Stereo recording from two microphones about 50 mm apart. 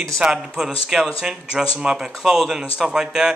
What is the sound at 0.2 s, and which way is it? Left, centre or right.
Speech, centre.